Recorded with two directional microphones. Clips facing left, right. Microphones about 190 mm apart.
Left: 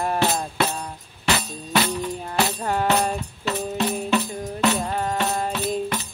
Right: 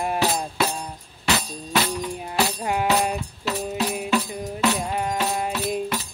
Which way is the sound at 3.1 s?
Centre (ahead or behind).